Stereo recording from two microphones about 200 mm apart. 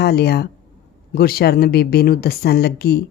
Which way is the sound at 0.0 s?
55° left (ahead or behind).